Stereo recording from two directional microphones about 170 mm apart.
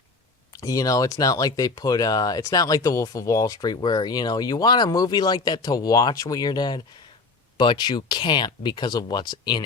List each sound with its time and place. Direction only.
0.5 s speech: 20° left (ahead or behind)